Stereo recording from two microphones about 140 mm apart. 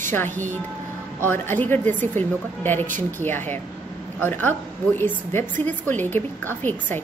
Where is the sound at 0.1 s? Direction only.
15° left (ahead or behind).